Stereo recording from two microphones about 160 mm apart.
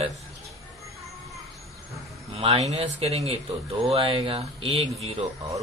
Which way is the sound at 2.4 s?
40° right (ahead or behind).